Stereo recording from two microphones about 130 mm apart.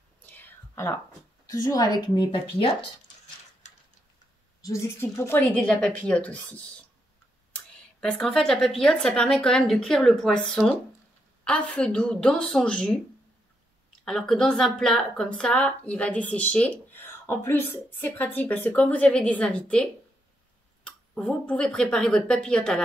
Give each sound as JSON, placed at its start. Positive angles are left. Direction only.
{"t": 0.2, "sound": "whispering", "side_deg": 15}
{"t": 1.5, "sound": "a woman's voice", "side_deg": 30}
{"t": 4.6, "sound": "a woman's voice", "side_deg": 25}
{"t": 5.4, "sound": "speech", "side_deg": 10}